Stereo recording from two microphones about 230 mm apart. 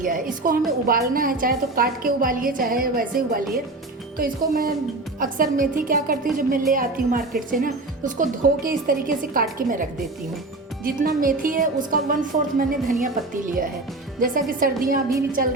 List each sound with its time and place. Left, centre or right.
0.0 s speech: right
10.8 s speech: right